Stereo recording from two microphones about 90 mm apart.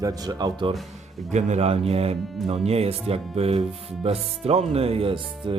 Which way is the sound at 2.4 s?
90° right.